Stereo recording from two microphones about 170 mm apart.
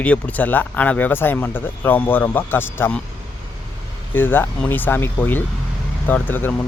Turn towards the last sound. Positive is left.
turn(degrees=10)  # may be behind; listen again after turning